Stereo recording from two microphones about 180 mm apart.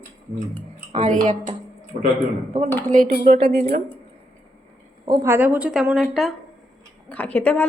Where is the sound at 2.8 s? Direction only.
50° right (ahead or behind).